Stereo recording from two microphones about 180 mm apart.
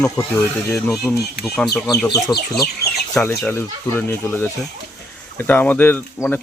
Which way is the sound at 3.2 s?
10° left (ahead or behind).